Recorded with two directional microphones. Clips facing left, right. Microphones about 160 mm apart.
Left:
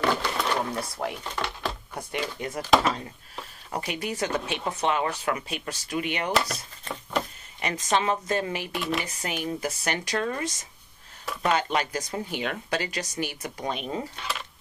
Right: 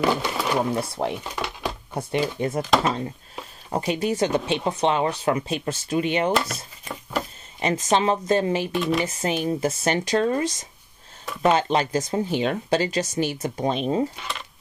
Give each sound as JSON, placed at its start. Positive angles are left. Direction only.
{"t": 0.0, "sound": "speech", "side_deg": -10}
{"t": 0.7, "sound": "speech", "side_deg": -25}
{"t": 1.2, "sound": "a sound", "side_deg": -10}
{"t": 2.0, "sound": "speech", "side_deg": -25}
{"t": 2.6, "sound": "speech", "side_deg": 0}
{"t": 3.7, "sound": "speech", "side_deg": -25}
{"t": 6.3, "sound": "a sound", "side_deg": -5}
{"t": 7.8, "sound": "speech", "side_deg": -25}
{"t": 8.7, "sound": "speech", "side_deg": 0}
{"t": 9.0, "sound": "speech", "side_deg": -25}
{"t": 11.5, "sound": "speech", "side_deg": -25}